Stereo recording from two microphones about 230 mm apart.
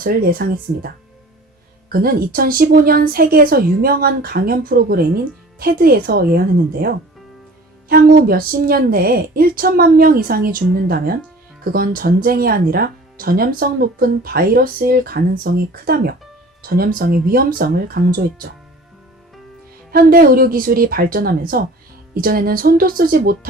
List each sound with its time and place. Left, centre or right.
0.0 s speech: right
1.9 s speech: right
19.9 s speech: right